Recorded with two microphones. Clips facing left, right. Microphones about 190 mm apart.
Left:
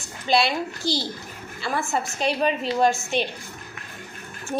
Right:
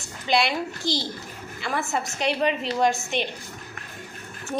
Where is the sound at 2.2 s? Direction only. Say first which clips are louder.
Even; 20° right (ahead or behind).